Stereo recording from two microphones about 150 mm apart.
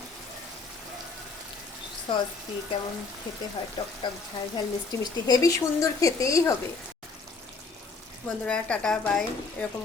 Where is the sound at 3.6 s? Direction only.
35° left (ahead or behind).